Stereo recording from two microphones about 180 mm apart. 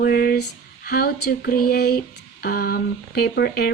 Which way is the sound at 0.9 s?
60° left (ahead or behind).